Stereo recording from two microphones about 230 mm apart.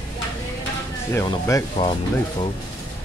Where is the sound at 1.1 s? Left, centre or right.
Centre.